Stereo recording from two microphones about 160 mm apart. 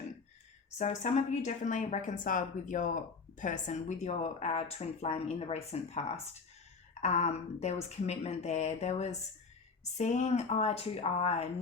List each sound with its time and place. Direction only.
0.8 s a woman's voice: 45° left (ahead or behind)